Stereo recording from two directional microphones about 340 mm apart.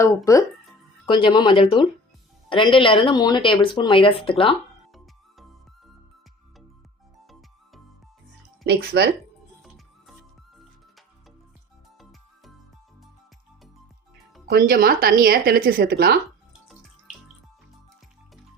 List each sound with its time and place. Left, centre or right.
0.0 s speech: centre
8.6 s speech: right
9.6 s music: centre
14.5 s speech: right